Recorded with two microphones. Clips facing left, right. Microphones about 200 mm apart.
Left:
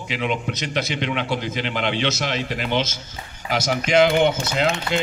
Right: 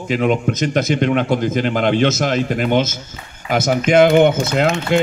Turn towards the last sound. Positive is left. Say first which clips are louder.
# right 6 dB
turn(degrees=-50)  # may be behind; listen again after turning